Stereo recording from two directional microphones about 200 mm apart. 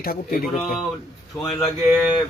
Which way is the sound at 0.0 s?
50° left (ahead or behind).